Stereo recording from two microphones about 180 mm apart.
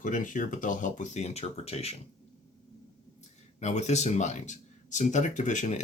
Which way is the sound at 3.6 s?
40° left (ahead or behind).